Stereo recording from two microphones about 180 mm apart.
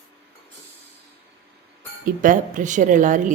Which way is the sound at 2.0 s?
45° right (ahead or behind).